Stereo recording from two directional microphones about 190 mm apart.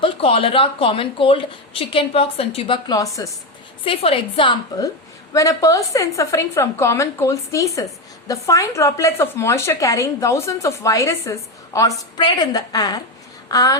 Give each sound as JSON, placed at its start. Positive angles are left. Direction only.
{"t": 0.0, "sound": "a woman's voice", "side_deg": 30}